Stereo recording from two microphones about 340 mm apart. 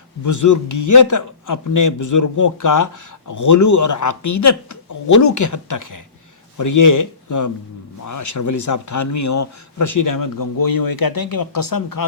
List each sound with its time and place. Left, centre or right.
0.3 s a man's voice: left